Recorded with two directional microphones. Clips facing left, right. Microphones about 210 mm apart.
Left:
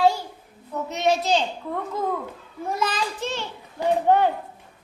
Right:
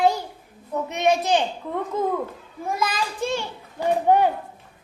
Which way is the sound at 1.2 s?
15° right (ahead or behind).